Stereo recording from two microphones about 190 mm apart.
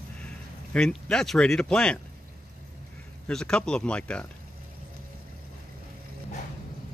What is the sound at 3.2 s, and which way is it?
Speech, 5° left (ahead or behind).